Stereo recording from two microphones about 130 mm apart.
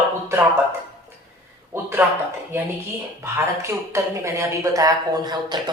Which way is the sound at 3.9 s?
25° right (ahead or behind).